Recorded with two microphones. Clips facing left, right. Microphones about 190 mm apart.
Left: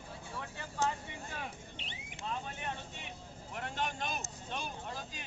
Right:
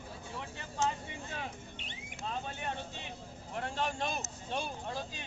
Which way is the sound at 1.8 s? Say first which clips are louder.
Right 1 dB; 50° right (ahead or behind).